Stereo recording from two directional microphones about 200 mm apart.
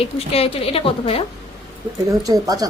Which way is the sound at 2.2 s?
15° right (ahead or behind).